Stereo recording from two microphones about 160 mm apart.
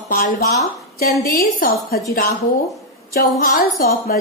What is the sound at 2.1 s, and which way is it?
A woman's voice, 70° left (ahead or behind).